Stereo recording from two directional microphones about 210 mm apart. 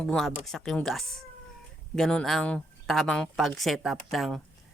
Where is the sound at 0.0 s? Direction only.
5° left (ahead or behind).